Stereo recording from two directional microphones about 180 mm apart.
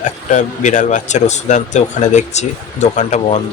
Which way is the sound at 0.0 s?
45° left (ahead or behind).